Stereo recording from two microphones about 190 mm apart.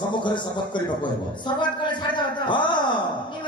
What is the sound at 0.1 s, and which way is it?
A man's voice, 25° left (ahead or behind).